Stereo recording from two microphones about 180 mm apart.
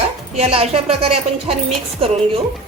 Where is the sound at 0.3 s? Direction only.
35° right (ahead or behind).